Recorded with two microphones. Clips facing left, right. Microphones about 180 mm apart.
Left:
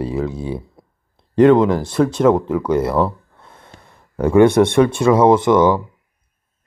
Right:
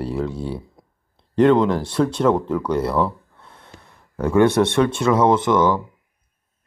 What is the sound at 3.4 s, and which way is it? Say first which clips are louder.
Gasp: left 2 dB; 10° left (ahead or behind).